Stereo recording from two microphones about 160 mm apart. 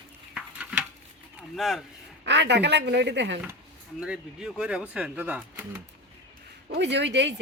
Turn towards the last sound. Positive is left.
turn(degrees=-90)